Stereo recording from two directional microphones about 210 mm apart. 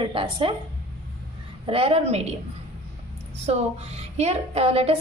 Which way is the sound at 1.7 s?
25° right (ahead or behind).